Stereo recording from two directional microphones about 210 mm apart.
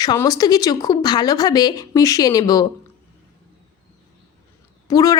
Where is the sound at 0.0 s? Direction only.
20° left (ahead or behind).